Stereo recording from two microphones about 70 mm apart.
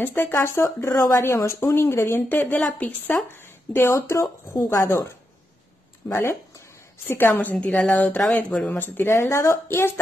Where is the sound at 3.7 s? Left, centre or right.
Left.